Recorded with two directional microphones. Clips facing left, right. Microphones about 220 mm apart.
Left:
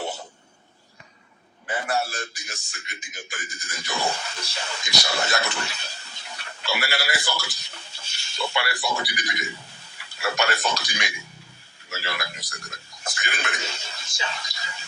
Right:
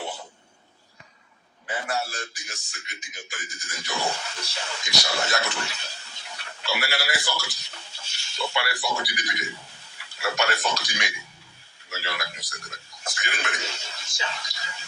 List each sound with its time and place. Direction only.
1.6 s a man's voice: 55° left (ahead or behind)